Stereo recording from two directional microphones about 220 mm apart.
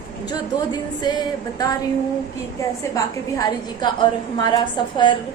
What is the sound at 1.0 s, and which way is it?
A woman's voice, 20° left (ahead or behind).